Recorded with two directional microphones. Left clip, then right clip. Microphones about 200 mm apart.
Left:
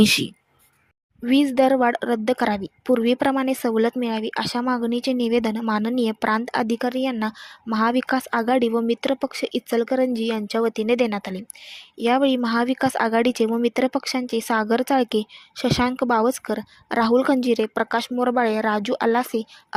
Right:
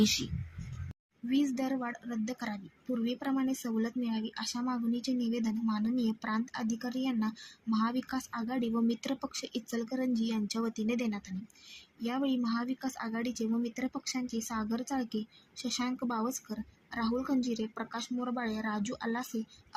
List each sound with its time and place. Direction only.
0.0 s speech: 50° left (ahead or behind)
1.3 s speech: 45° left (ahead or behind)